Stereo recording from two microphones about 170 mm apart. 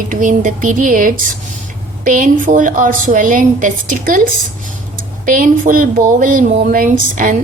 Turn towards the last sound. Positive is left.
turn(degrees=-50)  # may be behind; listen again after turning